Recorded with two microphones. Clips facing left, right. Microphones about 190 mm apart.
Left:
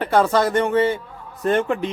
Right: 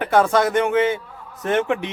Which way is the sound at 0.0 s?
5° right (ahead or behind).